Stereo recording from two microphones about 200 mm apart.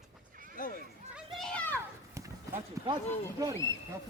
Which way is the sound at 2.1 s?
15° right (ahead or behind).